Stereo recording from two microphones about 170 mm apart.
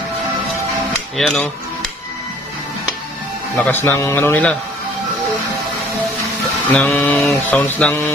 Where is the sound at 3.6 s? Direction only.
10° left (ahead or behind).